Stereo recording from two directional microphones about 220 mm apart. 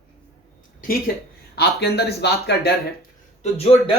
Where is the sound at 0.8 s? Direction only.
40° left (ahead or behind).